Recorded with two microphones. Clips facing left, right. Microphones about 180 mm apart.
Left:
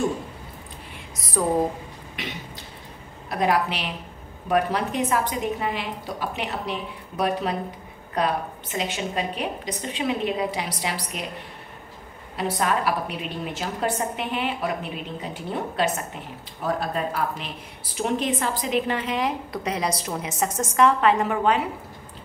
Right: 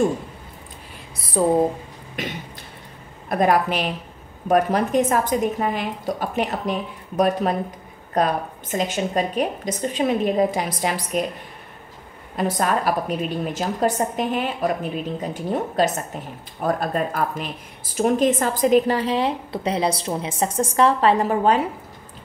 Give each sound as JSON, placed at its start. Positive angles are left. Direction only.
{"t": 1.1, "sound": "a sound", "side_deg": -30}
{"t": 2.2, "sound": "a woman's voice", "side_deg": -45}
{"t": 12.4, "sound": "a woman's voice", "side_deg": -45}